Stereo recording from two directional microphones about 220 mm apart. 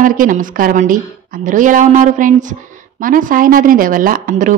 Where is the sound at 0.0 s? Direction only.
35° right (ahead or behind).